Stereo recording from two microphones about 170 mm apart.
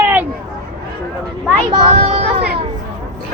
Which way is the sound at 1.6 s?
30° right (ahead or behind).